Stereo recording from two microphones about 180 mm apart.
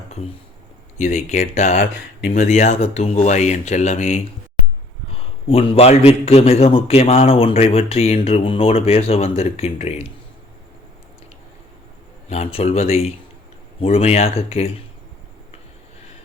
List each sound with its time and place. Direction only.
0.9 s a man's voice: 40° left (ahead or behind)
1.8 s speech: 60° left (ahead or behind)
2.4 s a man's voice: 40° left (ahead or behind)
5.5 s a man's voice: 35° left (ahead or behind)
12.3 s a man's voice: 35° left (ahead or behind)